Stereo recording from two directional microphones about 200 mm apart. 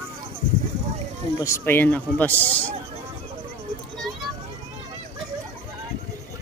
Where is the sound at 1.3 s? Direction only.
15° left (ahead or behind).